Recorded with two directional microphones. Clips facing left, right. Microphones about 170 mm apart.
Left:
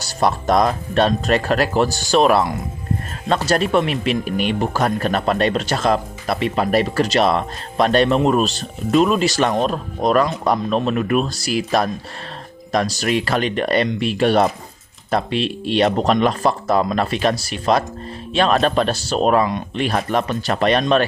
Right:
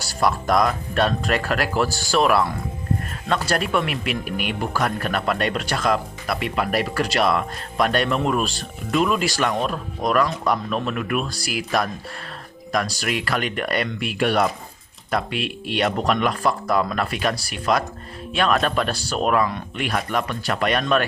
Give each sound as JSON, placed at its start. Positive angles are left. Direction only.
{"t": 0.1, "sound": "speech", "side_deg": 25}
{"t": 3.5, "sound": "speech", "side_deg": 25}